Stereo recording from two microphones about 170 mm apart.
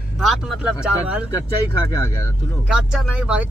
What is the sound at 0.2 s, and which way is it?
Speech, centre (ahead or behind).